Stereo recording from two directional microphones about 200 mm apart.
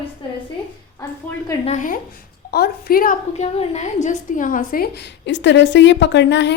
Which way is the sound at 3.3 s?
30° left (ahead or behind).